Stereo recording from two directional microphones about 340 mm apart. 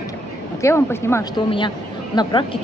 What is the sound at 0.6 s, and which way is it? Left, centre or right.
A woman's voice, centre.